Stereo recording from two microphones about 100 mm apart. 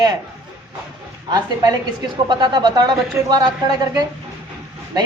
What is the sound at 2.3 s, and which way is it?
Speech, 45° right (ahead or behind).